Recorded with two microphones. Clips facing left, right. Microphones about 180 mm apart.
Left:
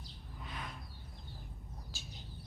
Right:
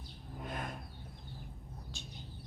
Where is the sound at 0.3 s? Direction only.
50° right (ahead or behind).